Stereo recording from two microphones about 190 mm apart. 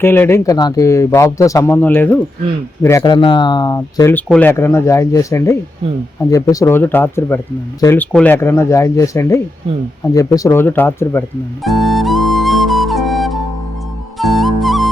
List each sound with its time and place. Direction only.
0.0 s speech: 10° left (ahead or behind)
3.0 s speech: 25° left (ahead or behind)
11.6 s flute: centre (ahead or behind)
14.2 s music: centre (ahead or behind)